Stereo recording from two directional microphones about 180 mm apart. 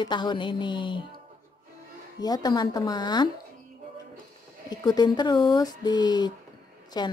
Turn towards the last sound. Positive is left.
turn(degrees=25)  # may be behind; listen again after turning